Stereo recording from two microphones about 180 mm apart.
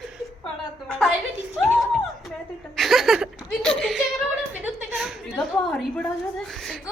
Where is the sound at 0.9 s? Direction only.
5° left (ahead or behind).